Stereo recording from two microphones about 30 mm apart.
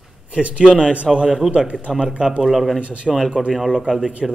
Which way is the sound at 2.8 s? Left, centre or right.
Right.